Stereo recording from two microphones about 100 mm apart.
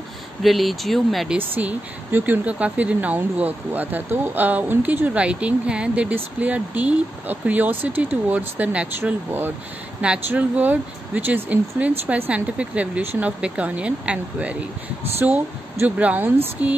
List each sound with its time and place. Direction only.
0.4 s speech: centre (ahead or behind)
1.6 s speech: 15° right (ahead or behind)